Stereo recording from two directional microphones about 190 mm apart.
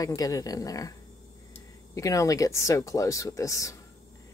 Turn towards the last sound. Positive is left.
turn(degrees=15)  # may be behind; listen again after turning